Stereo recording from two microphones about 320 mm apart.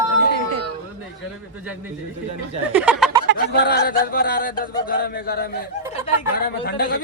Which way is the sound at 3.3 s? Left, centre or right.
Left.